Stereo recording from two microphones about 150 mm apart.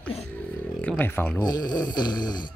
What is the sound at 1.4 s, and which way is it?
Snoring, 25° left (ahead or behind).